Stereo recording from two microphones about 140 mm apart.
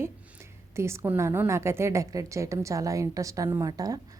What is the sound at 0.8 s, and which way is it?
A woman's voice, 20° right (ahead or behind).